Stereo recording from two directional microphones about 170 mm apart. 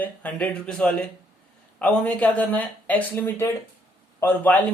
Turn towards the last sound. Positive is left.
turn(degrees=10)  # may be behind; listen again after turning